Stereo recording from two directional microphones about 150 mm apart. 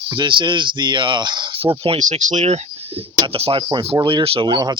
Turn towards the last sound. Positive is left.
turn(degrees=-30)  # may be behind; listen again after turning